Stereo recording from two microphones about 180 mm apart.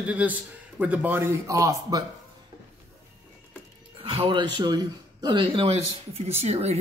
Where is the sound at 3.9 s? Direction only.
30° right (ahead or behind).